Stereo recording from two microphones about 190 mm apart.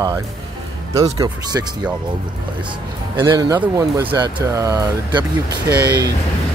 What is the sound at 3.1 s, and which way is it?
Speech, 25° right (ahead or behind).